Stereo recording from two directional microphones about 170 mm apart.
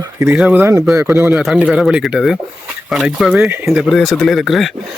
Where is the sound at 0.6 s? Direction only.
20° right (ahead or behind).